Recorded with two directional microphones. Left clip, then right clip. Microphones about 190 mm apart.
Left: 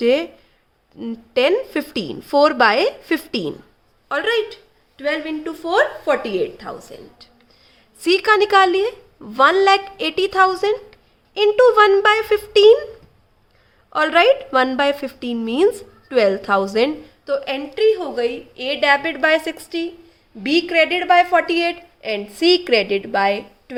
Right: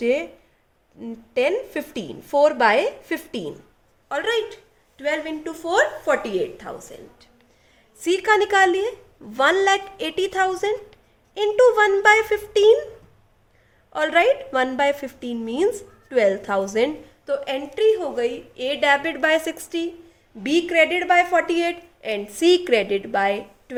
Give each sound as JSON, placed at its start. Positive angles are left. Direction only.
{"t": 0.0, "sound": "a woman's voice", "side_deg": 35}
{"t": 13.9, "sound": "a woman's voice", "side_deg": 25}